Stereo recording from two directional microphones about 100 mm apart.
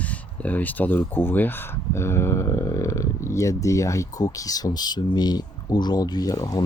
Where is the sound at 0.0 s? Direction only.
15° left (ahead or behind).